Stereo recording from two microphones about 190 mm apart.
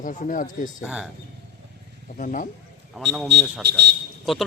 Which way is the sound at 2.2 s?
40° left (ahead or behind).